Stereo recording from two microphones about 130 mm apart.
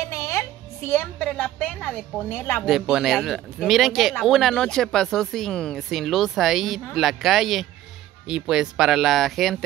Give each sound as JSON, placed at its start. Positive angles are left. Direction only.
{"t": 0.0, "sound": "a woman's voice", "side_deg": 20}
{"t": 2.6, "sound": "speech", "side_deg": -5}